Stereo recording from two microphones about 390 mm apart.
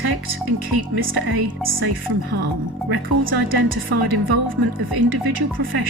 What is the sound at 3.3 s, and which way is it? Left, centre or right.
A woman's voice, right.